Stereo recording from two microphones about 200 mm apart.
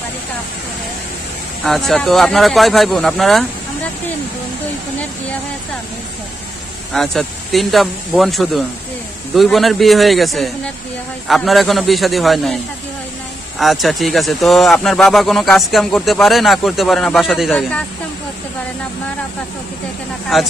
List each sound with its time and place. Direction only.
1.6 s a man's voice: centre (ahead or behind)
6.9 s a man's voice: centre (ahead or behind)
13.6 s a man's voice: centre (ahead or behind)
20.3 s a man's voice: centre (ahead or behind)